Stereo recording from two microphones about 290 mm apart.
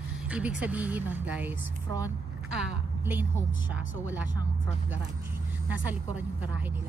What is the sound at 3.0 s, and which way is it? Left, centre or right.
Speech, centre.